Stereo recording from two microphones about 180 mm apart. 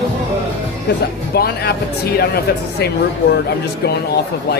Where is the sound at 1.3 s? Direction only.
60° left (ahead or behind).